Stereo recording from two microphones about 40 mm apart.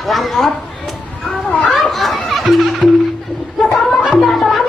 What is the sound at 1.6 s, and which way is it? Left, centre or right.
Music, centre.